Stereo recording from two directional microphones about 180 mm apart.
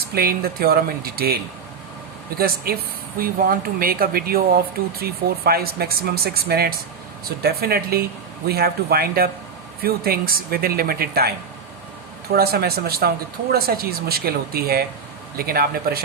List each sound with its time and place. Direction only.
0.0 s speech: 60° right (ahead or behind)
2.7 s speech: 55° right (ahead or behind)
12.3 s speech: 60° right (ahead or behind)